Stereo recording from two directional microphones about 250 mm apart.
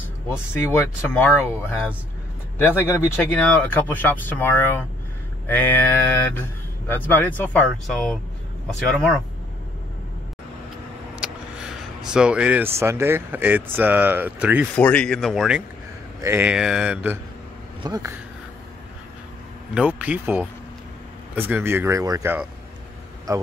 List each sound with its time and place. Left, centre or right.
0.5 s a man's voice: centre
12.0 s speech: centre
14.8 s a man's voice: centre
19.7 s a man's voice: centre